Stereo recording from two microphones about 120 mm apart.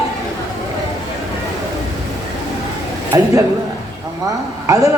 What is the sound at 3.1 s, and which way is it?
A man's voice, 25° right (ahead or behind).